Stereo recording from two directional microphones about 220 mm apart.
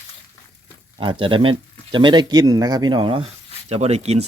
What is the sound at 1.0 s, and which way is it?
Speech, 25° right (ahead or behind).